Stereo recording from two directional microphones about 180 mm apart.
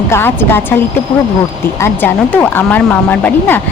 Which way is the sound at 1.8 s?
10° left (ahead or behind).